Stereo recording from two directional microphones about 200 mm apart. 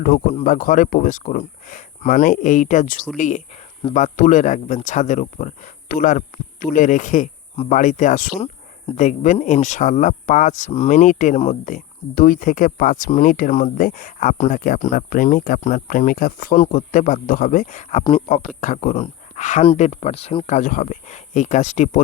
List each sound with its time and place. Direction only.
0.3 s speech: 40° left (ahead or behind)